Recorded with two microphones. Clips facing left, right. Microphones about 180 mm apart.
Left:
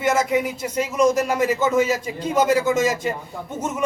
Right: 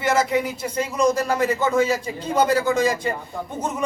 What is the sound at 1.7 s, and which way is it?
A man's voice, 10° left (ahead or behind).